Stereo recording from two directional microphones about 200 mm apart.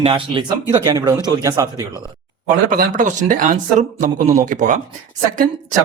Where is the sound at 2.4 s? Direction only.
45° right (ahead or behind).